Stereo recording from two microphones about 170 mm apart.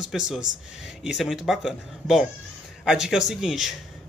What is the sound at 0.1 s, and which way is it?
Speech, centre (ahead or behind).